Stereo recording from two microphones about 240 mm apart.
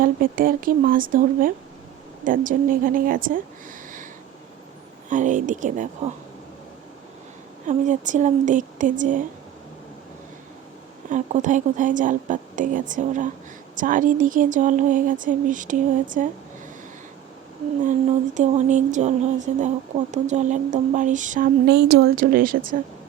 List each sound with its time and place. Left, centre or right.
0.0 s speech: right
5.0 s speech: right
7.7 s speech: right
11.1 s speech: right
18.3 s speech: right